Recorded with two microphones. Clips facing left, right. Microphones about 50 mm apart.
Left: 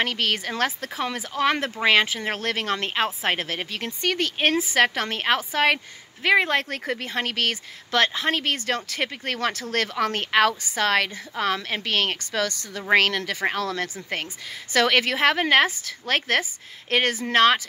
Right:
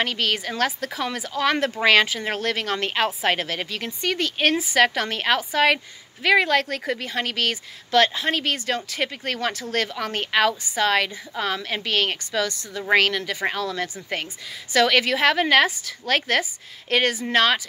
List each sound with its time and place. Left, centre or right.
0.0 s a woman's voice: left
2.8 s a woman's voice: right
3.7 s a woman's voice: left
4.5 s a woman's voice: left